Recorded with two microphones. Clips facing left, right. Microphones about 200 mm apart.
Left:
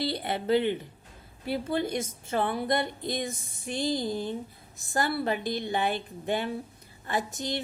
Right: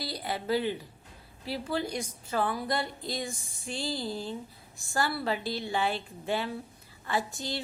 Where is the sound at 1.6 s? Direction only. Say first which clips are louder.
Left 2 dB; 25° left (ahead or behind).